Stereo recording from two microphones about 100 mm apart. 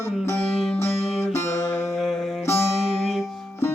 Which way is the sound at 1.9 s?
5° left (ahead or behind).